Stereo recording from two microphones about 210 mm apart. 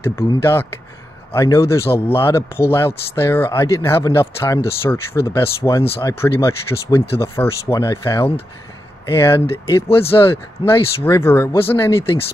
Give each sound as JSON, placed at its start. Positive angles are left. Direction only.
{"t": 0.0, "sound": "speech", "side_deg": 10}
{"t": 9.8, "sound": "speech", "side_deg": 25}
{"t": 10.6, "sound": "speech", "side_deg": 10}